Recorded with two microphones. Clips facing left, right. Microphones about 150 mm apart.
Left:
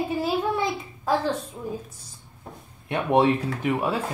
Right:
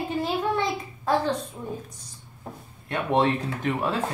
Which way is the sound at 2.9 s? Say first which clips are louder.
Left 3 dB; 10° left (ahead or behind).